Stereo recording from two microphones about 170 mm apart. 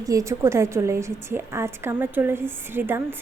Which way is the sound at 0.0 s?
20° right (ahead or behind).